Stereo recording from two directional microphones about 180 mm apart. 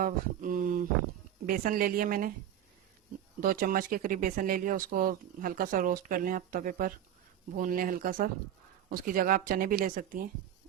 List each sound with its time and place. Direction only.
0.0 s speech: 50° right (ahead or behind)
3.4 s speech: 50° right (ahead or behind)